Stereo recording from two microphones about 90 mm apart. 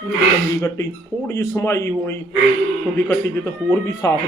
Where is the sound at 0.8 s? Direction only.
35° left (ahead or behind).